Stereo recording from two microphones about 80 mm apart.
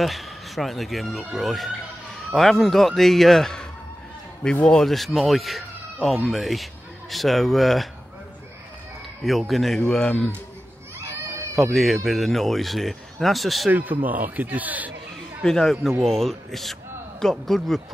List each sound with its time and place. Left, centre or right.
0.0 s speech: centre
4.6 s speech: centre
9.2 s a man's voice: centre
11.1 s baby cry: right
11.5 s speech: centre
13.7 s speech: right
15.4 s speech: centre